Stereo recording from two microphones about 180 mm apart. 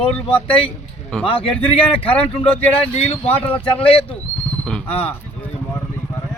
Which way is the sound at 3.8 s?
30° left (ahead or behind).